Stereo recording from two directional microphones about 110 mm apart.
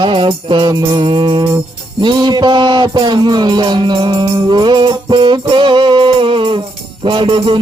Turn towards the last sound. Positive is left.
turn(degrees=-50)  # may be behind; listen again after turning